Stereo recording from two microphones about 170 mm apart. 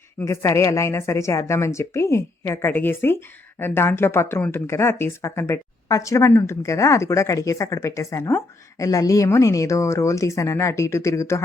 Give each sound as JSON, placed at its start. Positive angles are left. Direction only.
{"t": 0.2, "sound": "a woman's voice", "side_deg": 15}